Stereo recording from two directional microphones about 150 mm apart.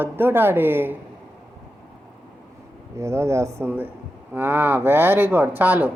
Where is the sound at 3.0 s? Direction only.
20° right (ahead or behind).